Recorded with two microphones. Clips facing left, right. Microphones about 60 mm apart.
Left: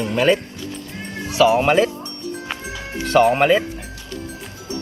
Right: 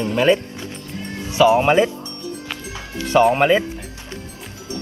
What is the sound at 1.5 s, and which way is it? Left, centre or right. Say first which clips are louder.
Speech: right 1 dB; centre.